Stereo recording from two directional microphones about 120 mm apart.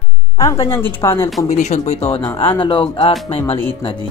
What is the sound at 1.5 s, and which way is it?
Speech, 80° left.